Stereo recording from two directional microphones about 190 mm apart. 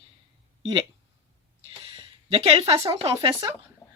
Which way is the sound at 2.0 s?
30° right (ahead or behind).